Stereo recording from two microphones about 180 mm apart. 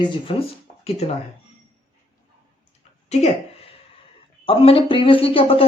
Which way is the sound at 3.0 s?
35° left (ahead or behind).